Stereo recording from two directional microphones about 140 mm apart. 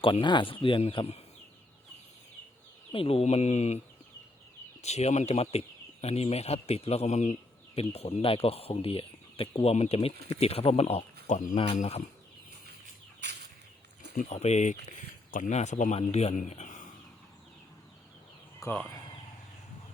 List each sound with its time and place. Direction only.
0.0 s speech: 35° left (ahead or behind)
2.9 s speech: 45° left (ahead or behind)
4.8 s speech: 50° left (ahead or behind)
14.2 s speech: 55° left (ahead or behind)
18.6 s speech: 25° left (ahead or behind)